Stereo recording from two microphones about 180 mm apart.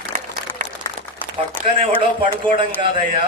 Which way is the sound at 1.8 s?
30° right (ahead or behind).